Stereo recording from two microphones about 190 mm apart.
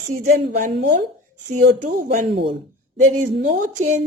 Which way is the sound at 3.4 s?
45° right (ahead or behind).